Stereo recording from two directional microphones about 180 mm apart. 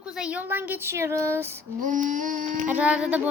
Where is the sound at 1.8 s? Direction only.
45° right (ahead or behind).